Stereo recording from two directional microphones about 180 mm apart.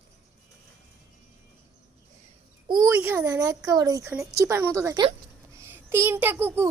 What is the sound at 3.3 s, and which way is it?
A child's voice, 20° right (ahead or behind).